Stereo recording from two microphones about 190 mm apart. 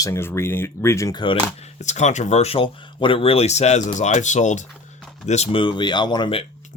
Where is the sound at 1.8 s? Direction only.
40° left (ahead or behind).